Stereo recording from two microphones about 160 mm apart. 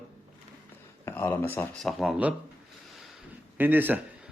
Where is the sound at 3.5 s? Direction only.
10° right (ahead or behind).